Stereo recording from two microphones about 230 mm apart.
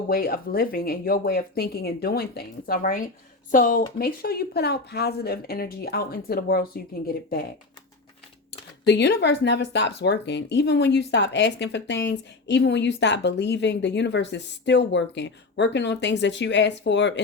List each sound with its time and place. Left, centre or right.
0.1 s speech: left
8.9 s speech: left